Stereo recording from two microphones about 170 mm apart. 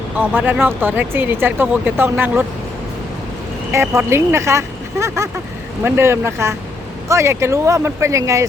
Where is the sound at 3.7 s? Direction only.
15° right (ahead or behind).